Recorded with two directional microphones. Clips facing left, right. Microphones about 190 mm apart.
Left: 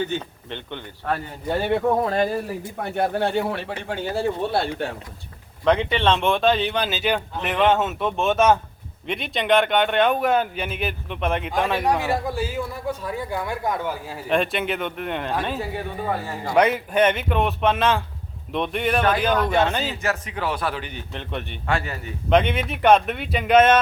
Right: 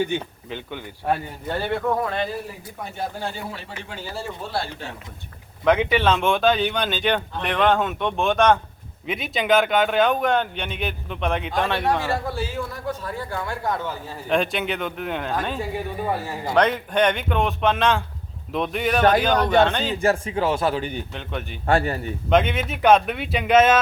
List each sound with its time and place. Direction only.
0.0 s speech: 10° right (ahead or behind)
1.5 s speech: 20° left (ahead or behind)
2.0 s speech: 45° left (ahead or behind)
2.8 s speech: 65° left (ahead or behind)
5.6 s a man's voice: 5° right (ahead or behind); by 14.2 s 10° left (ahead or behind)
14.3 s speech: centre (ahead or behind)
20.0 s speech: 30° right (ahead or behind)
21.1 s speech: centre (ahead or behind)
21.7 s a man's voice: 35° right (ahead or behind)
22.3 s speech: centre (ahead or behind)